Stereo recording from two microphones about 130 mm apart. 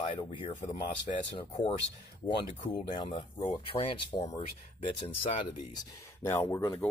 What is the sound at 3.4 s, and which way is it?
Speech, 60° left (ahead or behind).